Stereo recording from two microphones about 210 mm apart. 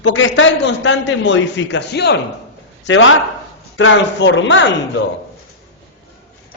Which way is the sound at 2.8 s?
70° left (ahead or behind).